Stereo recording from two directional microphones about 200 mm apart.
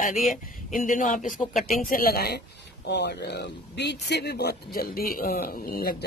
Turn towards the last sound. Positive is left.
turn(degrees=45)  # may be behind; listen again after turning